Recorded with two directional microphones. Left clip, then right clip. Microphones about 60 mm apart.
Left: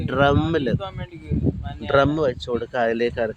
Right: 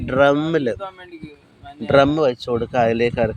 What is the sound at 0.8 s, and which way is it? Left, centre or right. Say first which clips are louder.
Speech: right 1 dB; left.